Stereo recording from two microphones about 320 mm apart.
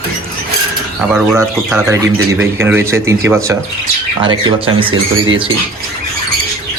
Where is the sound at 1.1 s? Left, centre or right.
Centre.